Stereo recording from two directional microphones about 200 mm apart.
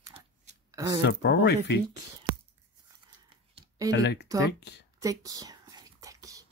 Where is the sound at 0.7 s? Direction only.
15° right (ahead or behind).